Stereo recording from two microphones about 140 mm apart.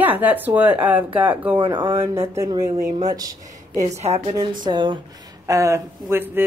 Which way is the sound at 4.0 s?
50° right (ahead or behind).